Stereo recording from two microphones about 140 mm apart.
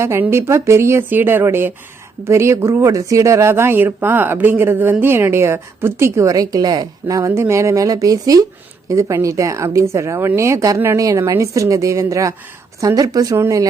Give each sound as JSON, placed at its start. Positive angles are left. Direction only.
{"t": 0.0, "sound": "speech", "side_deg": -20}